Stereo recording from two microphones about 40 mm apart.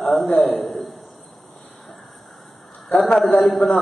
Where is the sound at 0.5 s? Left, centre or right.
Centre.